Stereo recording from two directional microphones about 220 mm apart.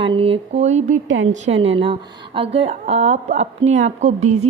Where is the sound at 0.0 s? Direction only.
25° right (ahead or behind).